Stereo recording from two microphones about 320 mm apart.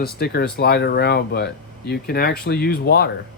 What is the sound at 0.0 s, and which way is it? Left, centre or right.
Speech, left.